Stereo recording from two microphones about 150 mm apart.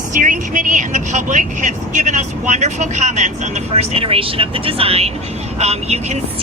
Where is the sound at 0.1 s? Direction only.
60° right (ahead or behind).